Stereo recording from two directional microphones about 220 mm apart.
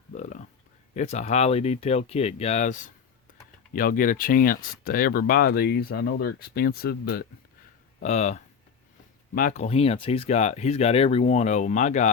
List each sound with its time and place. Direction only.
0.1 s a sound: 35° left (ahead or behind)
0.9 s speech: 30° left (ahead or behind)
8.0 s speech: 30° left (ahead or behind)